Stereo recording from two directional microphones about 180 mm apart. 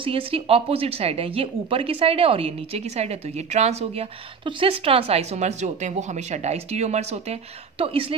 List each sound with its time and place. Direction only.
0.0 s speech: 30° right (ahead or behind)